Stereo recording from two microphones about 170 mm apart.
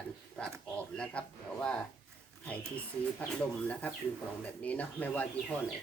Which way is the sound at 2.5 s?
10° left (ahead or behind).